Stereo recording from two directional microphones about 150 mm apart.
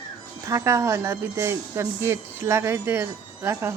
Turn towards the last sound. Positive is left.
turn(degrees=-15)  # may be behind; listen again after turning